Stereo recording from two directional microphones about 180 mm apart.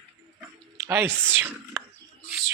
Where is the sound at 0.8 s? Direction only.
15° right (ahead or behind).